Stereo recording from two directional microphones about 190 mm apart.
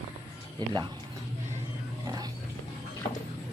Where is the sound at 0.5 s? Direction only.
20° right (ahead or behind).